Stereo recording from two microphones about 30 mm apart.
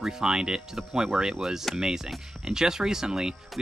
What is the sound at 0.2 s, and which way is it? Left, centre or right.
Speech, right.